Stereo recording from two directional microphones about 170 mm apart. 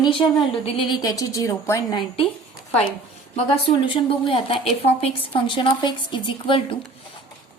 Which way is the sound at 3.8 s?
30° left (ahead or behind).